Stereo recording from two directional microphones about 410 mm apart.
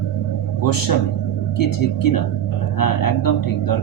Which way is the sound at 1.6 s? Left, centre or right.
Left.